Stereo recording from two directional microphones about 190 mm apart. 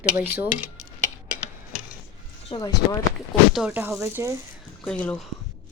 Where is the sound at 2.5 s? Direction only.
20° left (ahead or behind).